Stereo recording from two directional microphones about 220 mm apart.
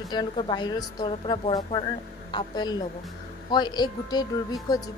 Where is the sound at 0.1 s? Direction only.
20° left (ahead or behind).